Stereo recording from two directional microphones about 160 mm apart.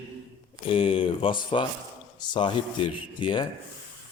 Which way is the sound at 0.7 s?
35° left (ahead or behind).